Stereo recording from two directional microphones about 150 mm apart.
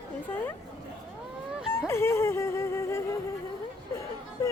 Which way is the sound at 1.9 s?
15° left (ahead or behind).